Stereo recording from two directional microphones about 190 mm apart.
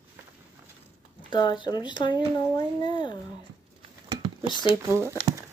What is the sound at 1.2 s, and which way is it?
Speech, 25° left (ahead or behind).